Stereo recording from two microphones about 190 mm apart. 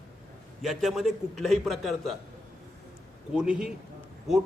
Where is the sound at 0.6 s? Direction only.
Centre (ahead or behind).